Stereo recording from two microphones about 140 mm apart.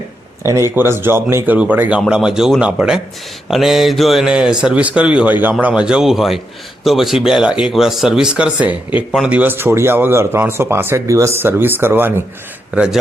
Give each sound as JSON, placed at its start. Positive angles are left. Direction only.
{"t": 0.4, "sound": "speech", "side_deg": -20}